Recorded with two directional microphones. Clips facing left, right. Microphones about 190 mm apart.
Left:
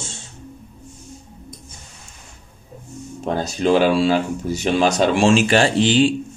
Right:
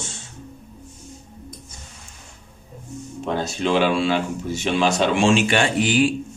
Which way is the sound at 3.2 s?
40° left (ahead or behind).